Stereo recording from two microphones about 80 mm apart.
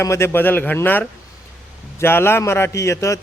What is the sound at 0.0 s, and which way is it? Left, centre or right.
A man's voice, left.